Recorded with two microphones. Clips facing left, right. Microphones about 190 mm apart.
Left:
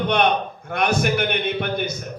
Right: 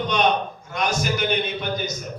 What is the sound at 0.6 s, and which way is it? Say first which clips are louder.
A man's voice: left 5 dB; 60° left (ahead or behind).